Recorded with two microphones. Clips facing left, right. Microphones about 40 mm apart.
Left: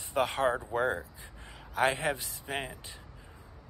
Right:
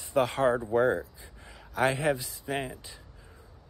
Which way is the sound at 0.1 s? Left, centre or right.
Left.